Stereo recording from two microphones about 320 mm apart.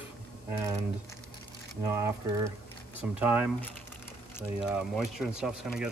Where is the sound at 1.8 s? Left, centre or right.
Centre.